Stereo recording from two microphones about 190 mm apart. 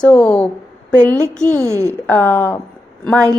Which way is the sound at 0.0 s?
10° left (ahead or behind).